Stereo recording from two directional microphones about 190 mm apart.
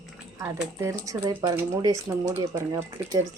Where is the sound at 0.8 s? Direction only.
15° right (ahead or behind).